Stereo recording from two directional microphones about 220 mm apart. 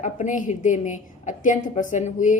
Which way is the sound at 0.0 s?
35° left (ahead or behind).